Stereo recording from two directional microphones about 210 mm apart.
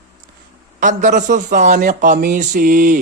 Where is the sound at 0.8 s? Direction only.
35° right (ahead or behind).